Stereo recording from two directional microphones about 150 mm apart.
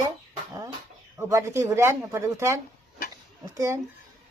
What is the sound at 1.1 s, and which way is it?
Speech, 20° right (ahead or behind).